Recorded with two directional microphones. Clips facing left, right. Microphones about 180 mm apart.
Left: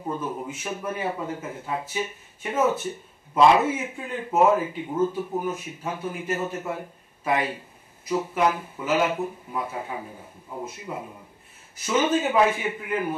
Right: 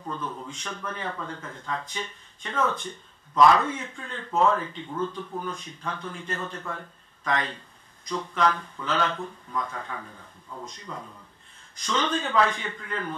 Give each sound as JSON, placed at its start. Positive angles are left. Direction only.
{"t": 0.1, "sound": "speech", "side_deg": 10}
{"t": 3.3, "sound": "a man's voice", "side_deg": 20}
{"t": 3.6, "sound": "speech", "side_deg": 10}
{"t": 10.6, "sound": "speech", "side_deg": 5}
{"t": 11.0, "sound": "a man's voice", "side_deg": 20}
{"t": 11.8, "sound": "speech", "side_deg": 5}